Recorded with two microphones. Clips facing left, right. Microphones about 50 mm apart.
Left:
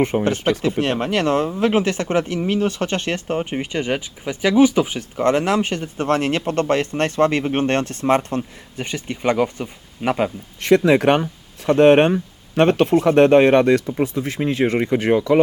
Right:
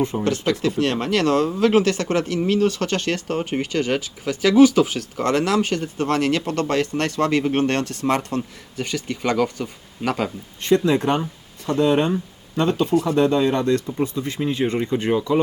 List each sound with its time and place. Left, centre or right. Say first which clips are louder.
0.1 s speech: left 4 dB; left
0.6 s speech: left 1 dB; left
10.6 s speech: left 4 dB; left
12.9 s speech: left 4 dB; left
13.1 s speech: left 9 dB; left
14.0 s speech: left 2 dB; left